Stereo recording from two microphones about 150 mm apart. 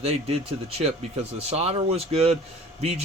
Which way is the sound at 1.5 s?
45° right (ahead or behind).